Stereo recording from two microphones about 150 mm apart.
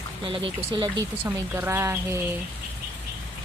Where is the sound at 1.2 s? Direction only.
15° right (ahead or behind).